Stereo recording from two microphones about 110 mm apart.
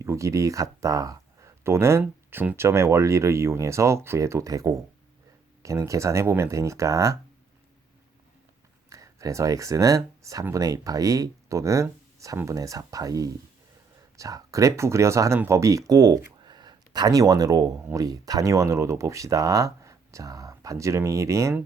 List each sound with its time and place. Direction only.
0.0 s speech: 25° right (ahead or behind)
8.9 s speech: 30° right (ahead or behind)
16.4 s a sound: 40° right (ahead or behind)
17.9 s speech: 35° right (ahead or behind)